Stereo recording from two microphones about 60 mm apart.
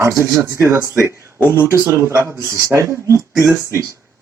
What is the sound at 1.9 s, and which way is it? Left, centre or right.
Speech, right.